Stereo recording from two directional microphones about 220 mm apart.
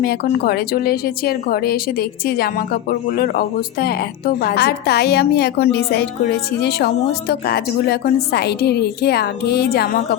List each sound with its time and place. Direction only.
0.0 s a woman's voice: 45° left (ahead or behind)